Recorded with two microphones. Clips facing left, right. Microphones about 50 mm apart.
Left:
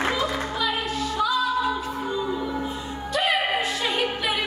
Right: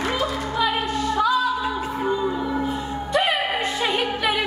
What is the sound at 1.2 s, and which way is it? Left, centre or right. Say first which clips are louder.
Music: right 2 dB; right.